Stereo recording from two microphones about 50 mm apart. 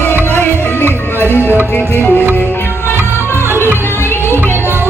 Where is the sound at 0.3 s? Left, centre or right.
Left.